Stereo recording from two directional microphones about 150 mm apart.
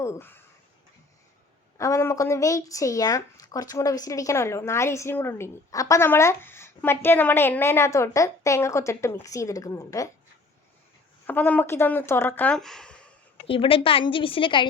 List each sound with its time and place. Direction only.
0.0 s speech: 15° left (ahead or behind)
1.8 s a woman's voice: 20° left (ahead or behind)
11.3 s speech: 10° left (ahead or behind)
13.5 s a woman's voice: 40° left (ahead or behind)